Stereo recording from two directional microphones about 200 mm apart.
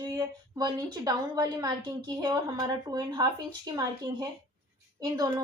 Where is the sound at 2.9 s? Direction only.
20° right (ahead or behind).